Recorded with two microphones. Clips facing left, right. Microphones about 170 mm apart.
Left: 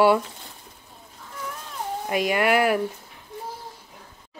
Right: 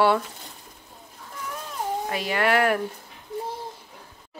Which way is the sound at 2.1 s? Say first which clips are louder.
Left 4 dB; 15° left (ahead or behind).